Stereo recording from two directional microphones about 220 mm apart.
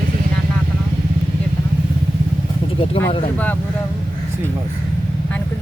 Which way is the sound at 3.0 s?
25° left (ahead or behind).